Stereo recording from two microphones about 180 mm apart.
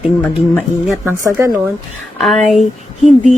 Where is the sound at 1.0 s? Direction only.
15° right (ahead or behind).